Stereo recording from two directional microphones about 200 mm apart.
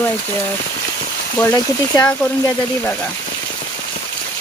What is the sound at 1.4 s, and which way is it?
Speech, 15° left (ahead or behind).